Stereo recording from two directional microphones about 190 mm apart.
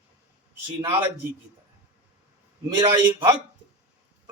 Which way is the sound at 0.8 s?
25° right (ahead or behind).